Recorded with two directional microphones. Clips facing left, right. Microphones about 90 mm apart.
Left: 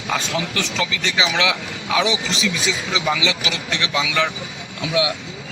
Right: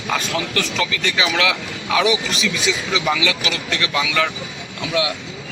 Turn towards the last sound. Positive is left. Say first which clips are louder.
# left 1 dB
turn(degrees=15)  # may be behind; listen again after turning